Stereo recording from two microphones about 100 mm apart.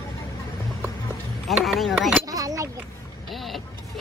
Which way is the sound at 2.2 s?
35° right (ahead or behind).